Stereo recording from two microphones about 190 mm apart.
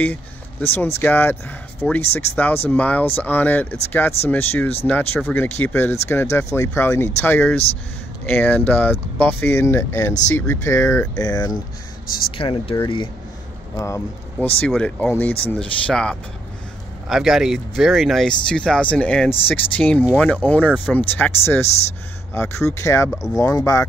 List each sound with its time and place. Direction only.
0.0 s speech: 10° left (ahead or behind)